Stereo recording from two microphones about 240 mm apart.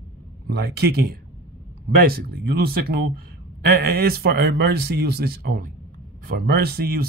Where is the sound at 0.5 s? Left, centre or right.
Right.